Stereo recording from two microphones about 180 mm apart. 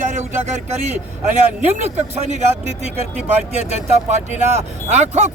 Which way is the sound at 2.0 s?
40° right (ahead or behind).